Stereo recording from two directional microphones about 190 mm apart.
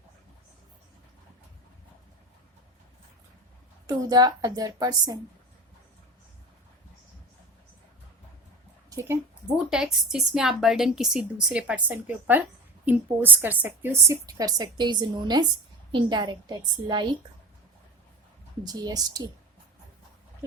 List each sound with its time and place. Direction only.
3.8 s a woman's voice: 20° right (ahead or behind)
8.9 s a sound: 15° right (ahead or behind)
9.6 s a woman's voice: 5° right (ahead or behind); by 17.2 s 25° right (ahead or behind)
18.6 s a woman's voice: 20° right (ahead or behind)